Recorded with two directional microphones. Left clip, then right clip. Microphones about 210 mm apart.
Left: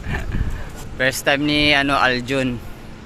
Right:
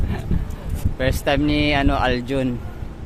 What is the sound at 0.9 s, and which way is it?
Speech, 10° right (ahead or behind).